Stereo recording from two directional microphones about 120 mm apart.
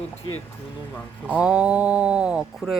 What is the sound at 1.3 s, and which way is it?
Speech, 10° right (ahead or behind).